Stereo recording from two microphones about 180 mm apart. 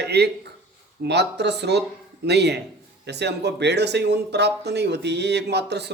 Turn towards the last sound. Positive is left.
turn(degrees=-70)  # may be behind; listen again after turning